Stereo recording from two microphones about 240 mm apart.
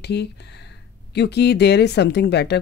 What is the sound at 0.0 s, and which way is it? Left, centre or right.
Speech, left.